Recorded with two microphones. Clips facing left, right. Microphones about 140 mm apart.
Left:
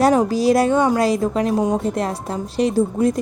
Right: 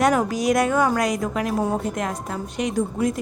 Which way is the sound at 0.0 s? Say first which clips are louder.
Left 4 dB; 30° left (ahead or behind).